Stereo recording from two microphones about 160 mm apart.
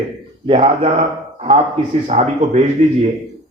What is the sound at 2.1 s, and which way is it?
Speech, 40° right (ahead or behind).